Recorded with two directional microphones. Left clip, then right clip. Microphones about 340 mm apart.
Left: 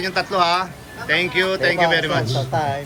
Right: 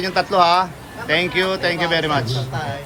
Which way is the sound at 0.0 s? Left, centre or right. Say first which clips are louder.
Right 3 dB; centre.